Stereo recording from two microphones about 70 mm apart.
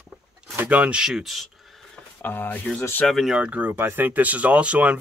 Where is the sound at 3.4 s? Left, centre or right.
Right.